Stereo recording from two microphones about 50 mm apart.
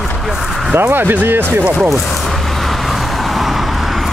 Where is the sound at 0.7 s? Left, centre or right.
Right.